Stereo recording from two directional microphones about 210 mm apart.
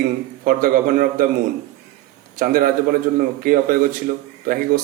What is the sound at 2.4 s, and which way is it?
A man's voice, 45° right (ahead or behind).